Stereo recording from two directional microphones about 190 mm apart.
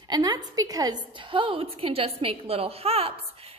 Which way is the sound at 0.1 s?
20° right (ahead or behind).